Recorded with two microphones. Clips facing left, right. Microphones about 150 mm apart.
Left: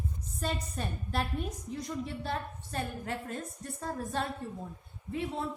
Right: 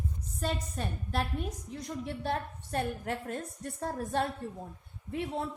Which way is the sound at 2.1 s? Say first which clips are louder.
Right 2 dB; 60° right (ahead or behind).